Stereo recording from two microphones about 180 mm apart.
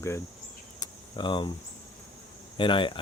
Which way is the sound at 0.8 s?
25° left (ahead or behind).